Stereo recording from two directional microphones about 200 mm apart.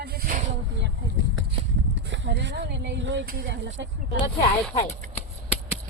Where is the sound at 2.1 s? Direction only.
60° right (ahead or behind).